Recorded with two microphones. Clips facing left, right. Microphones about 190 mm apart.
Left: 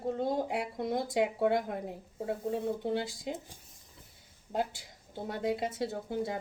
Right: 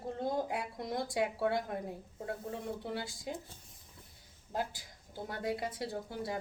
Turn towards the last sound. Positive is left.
turn(degrees=25)  # may be behind; listen again after turning